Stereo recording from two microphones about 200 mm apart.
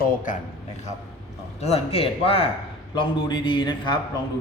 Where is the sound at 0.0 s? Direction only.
40° left (ahead or behind).